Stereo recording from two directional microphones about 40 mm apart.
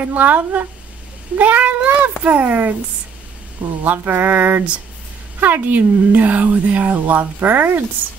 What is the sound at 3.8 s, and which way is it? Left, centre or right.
Mantra, right.